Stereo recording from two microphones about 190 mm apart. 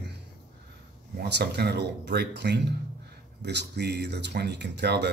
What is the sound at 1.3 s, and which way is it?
Speech, 60° right (ahead or behind).